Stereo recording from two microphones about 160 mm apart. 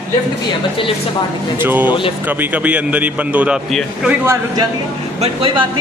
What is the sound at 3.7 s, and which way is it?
Speech, centre (ahead or behind).